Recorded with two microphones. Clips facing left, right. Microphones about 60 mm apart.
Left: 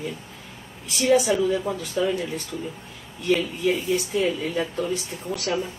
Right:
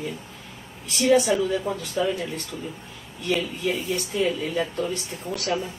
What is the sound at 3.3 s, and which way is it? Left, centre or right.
Speech, centre.